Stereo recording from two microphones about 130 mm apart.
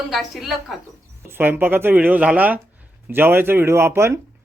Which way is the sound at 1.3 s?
15° right (ahead or behind).